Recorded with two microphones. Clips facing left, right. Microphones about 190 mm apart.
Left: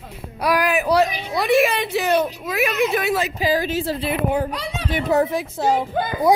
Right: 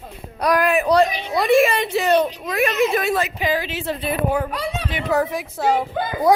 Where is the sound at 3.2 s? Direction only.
35° left (ahead or behind).